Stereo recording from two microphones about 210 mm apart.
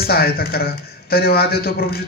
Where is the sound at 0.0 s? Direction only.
45° left (ahead or behind).